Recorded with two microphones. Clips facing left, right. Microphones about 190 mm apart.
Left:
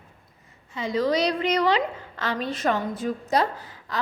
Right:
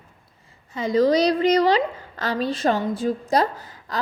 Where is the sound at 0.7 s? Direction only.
40° right (ahead or behind).